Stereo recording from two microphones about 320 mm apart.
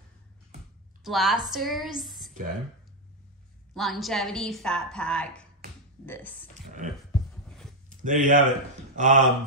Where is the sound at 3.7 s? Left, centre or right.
Centre.